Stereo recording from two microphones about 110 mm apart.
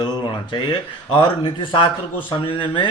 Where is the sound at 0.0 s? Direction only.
45° left (ahead or behind).